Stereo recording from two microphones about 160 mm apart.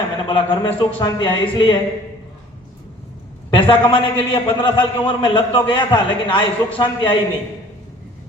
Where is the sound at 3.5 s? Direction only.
35° left (ahead or behind).